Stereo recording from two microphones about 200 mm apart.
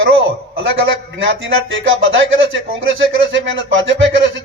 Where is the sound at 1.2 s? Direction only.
70° right (ahead or behind).